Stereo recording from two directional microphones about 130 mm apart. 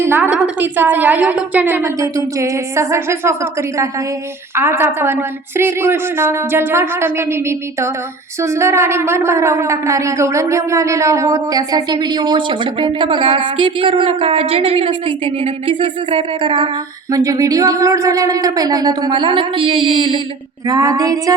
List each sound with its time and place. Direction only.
0.0 s a woman's voice: 15° right (ahead or behind)
2.0 s a woman's voice: 25° right (ahead or behind); by 16.7 s 40° right (ahead or behind)
17.1 s speech: 25° right (ahead or behind); by 20.2 s 45° right (ahead or behind)
20.7 s speech: 30° right (ahead or behind)